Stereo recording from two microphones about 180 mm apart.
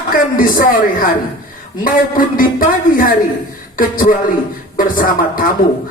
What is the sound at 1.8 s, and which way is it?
Speech, 50° left (ahead or behind).